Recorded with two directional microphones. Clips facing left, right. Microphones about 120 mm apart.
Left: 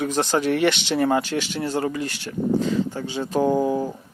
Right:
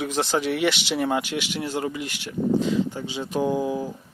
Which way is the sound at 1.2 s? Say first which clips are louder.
Left 3 dB; 40° left (ahead or behind).